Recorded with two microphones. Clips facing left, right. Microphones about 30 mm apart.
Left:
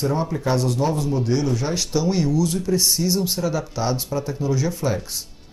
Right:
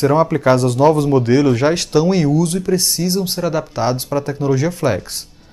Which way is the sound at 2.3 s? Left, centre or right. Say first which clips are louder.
Right 4 dB; centre.